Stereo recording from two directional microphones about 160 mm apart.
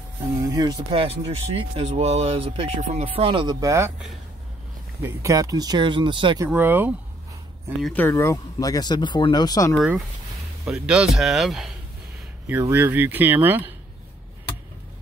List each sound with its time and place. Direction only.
0.4 s speech: 25° right (ahead or behind)
3.6 s speech: 15° right (ahead or behind)
5.0 s speech: 20° right (ahead or behind)
6.4 s speech: 10° right (ahead or behind)
7.8 s speech: 10° left (ahead or behind)
10.6 s speech: 5° right (ahead or behind)
12.4 s speech: 15° right (ahead or behind)